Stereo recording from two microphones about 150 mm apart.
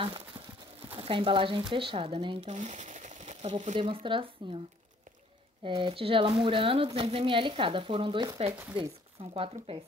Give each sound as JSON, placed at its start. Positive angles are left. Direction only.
{"t": 0.9, "sound": "a woman's voice", "side_deg": -35}
{"t": 3.7, "sound": "a woman's voice", "side_deg": -35}
{"t": 5.6, "sound": "a woman's voice", "side_deg": -35}